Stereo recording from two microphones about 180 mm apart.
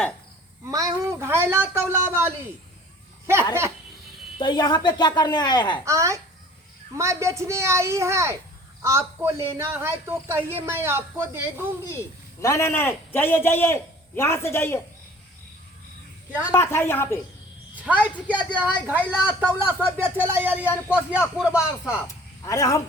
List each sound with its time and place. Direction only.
0.6 s a man's voice: 20° right (ahead or behind)
4.4 s speech: 25° left (ahead or behind)
5.8 s a man's voice: 15° right (ahead or behind)
11.9 s a man's voice: 15° left (ahead or behind)
16.5 s a man's voice: 15° left (ahead or behind)
17.8 s a man's voice: 10° right (ahead or behind)
22.0 s speech: 15° left (ahead or behind)